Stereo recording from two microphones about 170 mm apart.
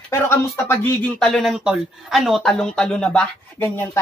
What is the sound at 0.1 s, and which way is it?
Speech, 15° left (ahead or behind).